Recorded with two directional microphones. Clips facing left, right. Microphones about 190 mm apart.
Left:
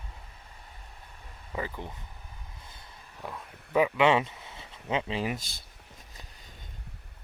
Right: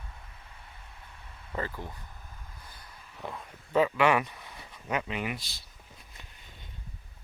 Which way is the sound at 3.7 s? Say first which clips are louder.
Left 1 dB; 15° left (ahead or behind).